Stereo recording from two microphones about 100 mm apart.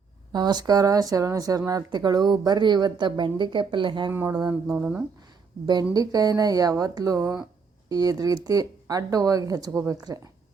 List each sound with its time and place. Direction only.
0.3 s speech: 45° right (ahead or behind)
4.1 s speech: 25° right (ahead or behind)
4.7 s speech: 10° right (ahead or behind)
5.9 s speech: 40° right (ahead or behind)